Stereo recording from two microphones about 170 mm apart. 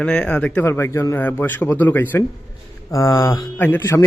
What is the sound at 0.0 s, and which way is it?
Speech, 5° left (ahead or behind).